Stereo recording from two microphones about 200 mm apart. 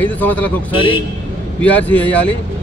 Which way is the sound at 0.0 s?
10° left (ahead or behind).